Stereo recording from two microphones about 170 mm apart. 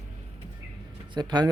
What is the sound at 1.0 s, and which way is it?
Speech, 25° right (ahead or behind).